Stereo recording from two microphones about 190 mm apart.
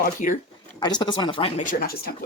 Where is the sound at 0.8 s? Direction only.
25° left (ahead or behind).